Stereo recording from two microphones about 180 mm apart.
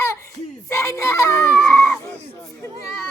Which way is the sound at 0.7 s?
15° left (ahead or behind).